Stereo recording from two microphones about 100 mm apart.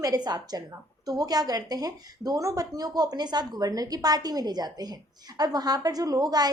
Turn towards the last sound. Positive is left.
turn(degrees=-40)  # may be behind; listen again after turning